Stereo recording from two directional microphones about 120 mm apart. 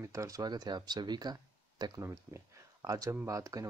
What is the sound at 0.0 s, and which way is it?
Speech, 25° right (ahead or behind).